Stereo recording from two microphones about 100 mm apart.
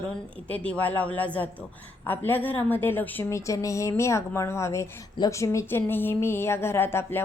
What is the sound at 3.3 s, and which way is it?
Speech, 30° left (ahead or behind).